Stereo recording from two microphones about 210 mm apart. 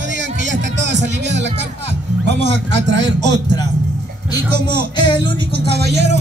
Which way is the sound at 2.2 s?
55° right (ahead or behind).